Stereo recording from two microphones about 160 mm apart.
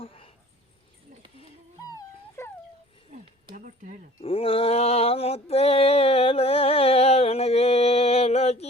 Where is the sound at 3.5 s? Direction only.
55° right (ahead or behind).